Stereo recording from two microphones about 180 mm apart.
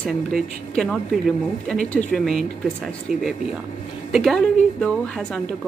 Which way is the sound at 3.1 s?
50° right (ahead or behind).